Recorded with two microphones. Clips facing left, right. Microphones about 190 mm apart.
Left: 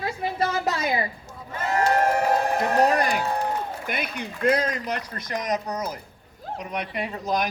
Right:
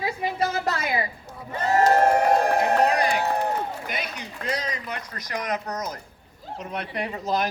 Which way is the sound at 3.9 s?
55° left (ahead or behind).